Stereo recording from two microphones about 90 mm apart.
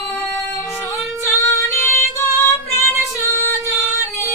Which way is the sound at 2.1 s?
30° left (ahead or behind).